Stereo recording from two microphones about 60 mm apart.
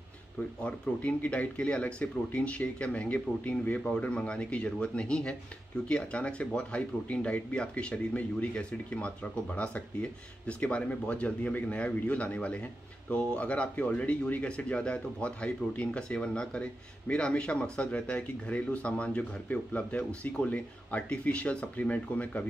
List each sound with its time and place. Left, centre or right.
0.6 s speech: left